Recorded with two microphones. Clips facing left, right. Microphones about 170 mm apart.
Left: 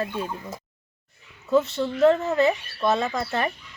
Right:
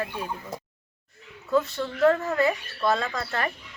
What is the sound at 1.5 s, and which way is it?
Speech, 20° left (ahead or behind).